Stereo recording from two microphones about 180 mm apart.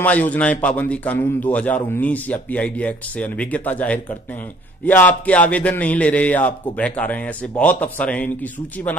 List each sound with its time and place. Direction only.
0.0 s a man's voice: 10° left (ahead or behind)